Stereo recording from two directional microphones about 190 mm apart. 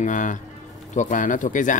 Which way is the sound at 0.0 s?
40° left (ahead or behind).